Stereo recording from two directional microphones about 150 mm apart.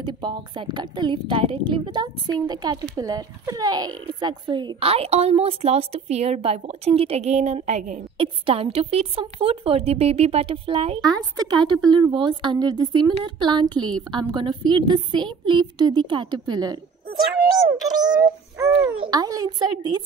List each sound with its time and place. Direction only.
0.0 s a woman's voice: 30° right (ahead or behind); by 8.0 s 50° right (ahead or behind)
8.2 s a woman's voice: 40° right (ahead or behind)
11.0 s a woman's voice: 25° right (ahead or behind)
18.2 s synthetic singing: 20° right (ahead or behind)
18.9 s a woman's voice: 25° right (ahead or behind)